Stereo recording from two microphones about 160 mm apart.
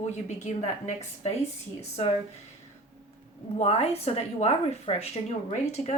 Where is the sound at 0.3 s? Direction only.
45° left (ahead or behind).